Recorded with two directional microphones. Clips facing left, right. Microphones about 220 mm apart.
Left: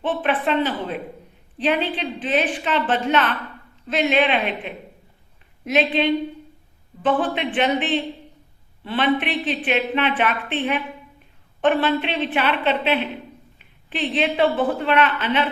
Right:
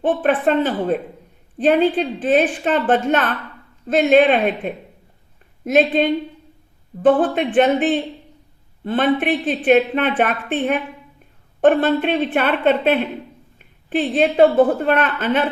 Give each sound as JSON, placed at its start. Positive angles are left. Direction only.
{"t": 0.0, "sound": "a woman's voice", "side_deg": -45}